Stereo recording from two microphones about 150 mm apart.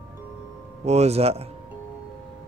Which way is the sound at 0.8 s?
45° right (ahead or behind).